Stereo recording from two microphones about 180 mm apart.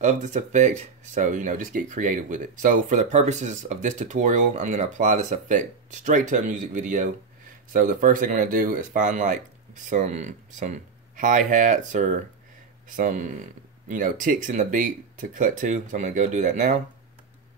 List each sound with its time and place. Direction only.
0.0 s speech: 40° right (ahead or behind)